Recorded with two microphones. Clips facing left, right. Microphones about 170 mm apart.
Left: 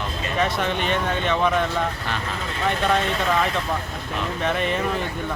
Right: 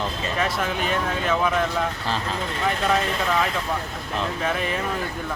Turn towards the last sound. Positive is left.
turn(degrees=0)  # may be behind; listen again after turning